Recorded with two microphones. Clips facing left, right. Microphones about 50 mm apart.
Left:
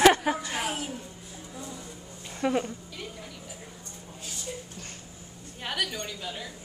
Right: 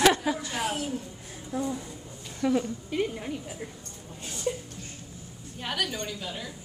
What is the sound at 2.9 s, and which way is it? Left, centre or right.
Speech, right.